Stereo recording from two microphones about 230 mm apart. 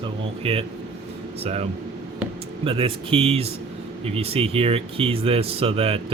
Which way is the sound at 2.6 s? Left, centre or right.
Right.